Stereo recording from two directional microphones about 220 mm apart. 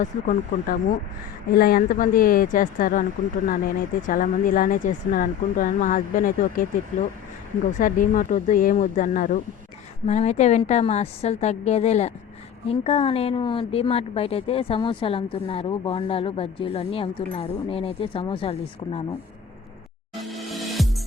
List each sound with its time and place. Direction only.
0.0 s speech: 40° left (ahead or behind)
7.8 s a woman's voice: 35° left (ahead or behind)
20.2 s music: centre (ahead or behind)